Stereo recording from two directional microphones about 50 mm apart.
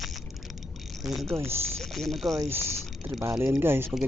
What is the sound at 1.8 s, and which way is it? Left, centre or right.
Mechanisms, centre.